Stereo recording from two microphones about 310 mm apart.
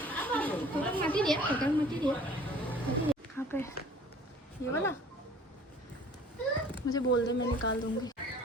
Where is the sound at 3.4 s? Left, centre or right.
Centre.